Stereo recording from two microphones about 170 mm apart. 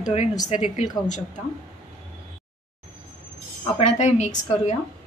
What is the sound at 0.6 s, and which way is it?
Speech, 45° left (ahead or behind).